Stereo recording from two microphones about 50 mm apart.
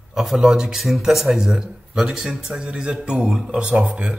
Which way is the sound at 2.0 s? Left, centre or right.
Centre.